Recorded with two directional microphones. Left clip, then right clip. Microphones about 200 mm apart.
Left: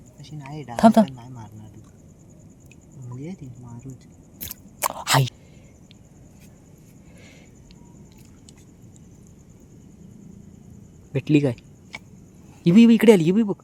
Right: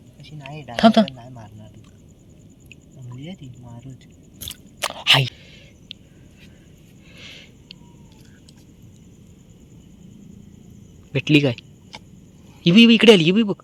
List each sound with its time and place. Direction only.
0.7 s speech: 10° left (ahead or behind)
4.4 s chewing: 20° left (ahead or behind)
7.2 s a sound: 10° left (ahead or behind)
11.1 s speech: 5° left (ahead or behind)
12.6 s speech: 10° left (ahead or behind)